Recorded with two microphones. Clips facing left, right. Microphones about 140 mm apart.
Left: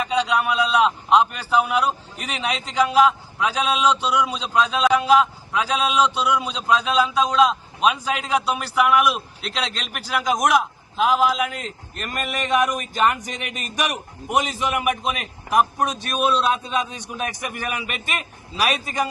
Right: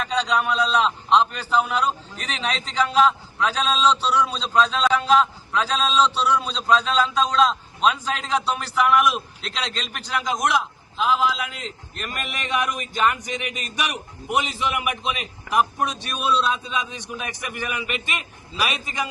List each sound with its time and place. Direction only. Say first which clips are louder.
0.0 s a man's voice: left 2 dB; 10° left (ahead or behind)
10.9 s a man's voice: left 3 dB; 45° left (ahead or behind)